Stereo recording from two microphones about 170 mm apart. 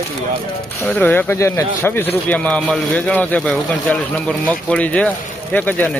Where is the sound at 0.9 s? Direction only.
10° left (ahead or behind).